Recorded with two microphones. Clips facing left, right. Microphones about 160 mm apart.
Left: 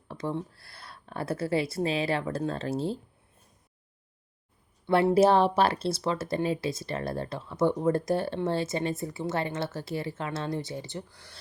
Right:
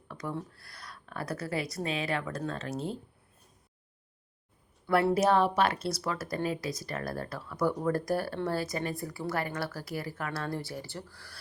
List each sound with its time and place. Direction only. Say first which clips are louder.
0.1 s speech: left 4 dB; 25° left (ahead or behind)
4.9 s speech: left 4 dB; 25° left (ahead or behind)